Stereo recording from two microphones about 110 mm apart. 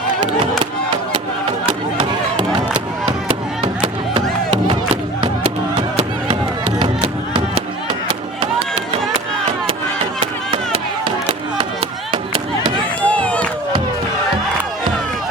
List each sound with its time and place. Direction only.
7.3 s a sound: 50° right (ahead or behind)
8.4 s run: 60° right (ahead or behind)
10.5 s chop: 50° right (ahead or behind)
13.1 s crowd: 10° left (ahead or behind)